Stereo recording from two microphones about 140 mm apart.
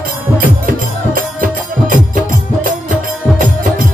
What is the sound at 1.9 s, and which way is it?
Music, 70° right (ahead or behind).